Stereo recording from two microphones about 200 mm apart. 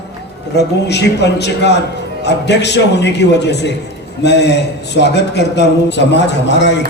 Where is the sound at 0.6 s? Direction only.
55° left (ahead or behind).